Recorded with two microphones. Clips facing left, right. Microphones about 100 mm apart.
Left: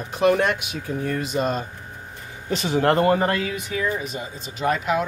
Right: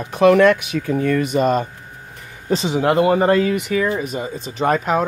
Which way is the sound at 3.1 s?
25° right (ahead or behind).